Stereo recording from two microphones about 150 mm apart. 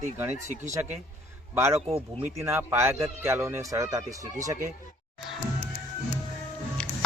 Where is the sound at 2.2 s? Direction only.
15° right (ahead or behind).